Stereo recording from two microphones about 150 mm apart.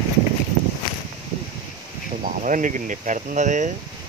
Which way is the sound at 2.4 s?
60° right (ahead or behind).